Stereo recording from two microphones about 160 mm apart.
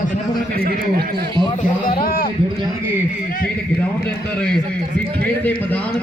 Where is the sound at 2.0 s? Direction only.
75° left (ahead or behind).